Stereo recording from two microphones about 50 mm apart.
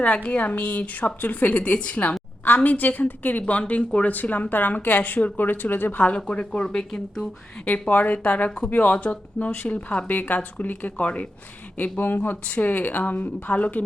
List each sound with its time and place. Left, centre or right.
0.0 s a woman's voice: left
6.1 s speech: left
7.6 s speech: left
8.4 s speech: centre
8.7 s a woman's voice: left
11.8 s a woman's voice: left